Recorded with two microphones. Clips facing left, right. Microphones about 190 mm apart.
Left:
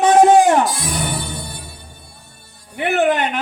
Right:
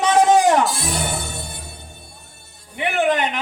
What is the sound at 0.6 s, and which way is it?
Music, 25° right (ahead or behind).